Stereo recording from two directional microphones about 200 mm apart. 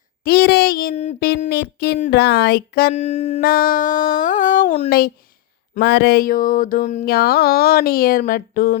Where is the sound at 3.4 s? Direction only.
45° left (ahead or behind).